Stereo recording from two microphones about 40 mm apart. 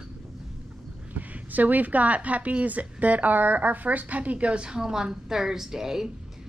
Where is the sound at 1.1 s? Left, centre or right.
Right.